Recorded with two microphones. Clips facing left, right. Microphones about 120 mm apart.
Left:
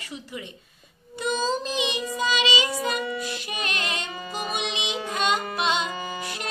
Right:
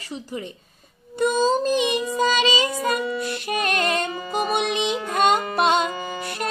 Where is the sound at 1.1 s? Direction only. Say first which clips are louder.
Right 6 dB; 50° right (ahead or behind).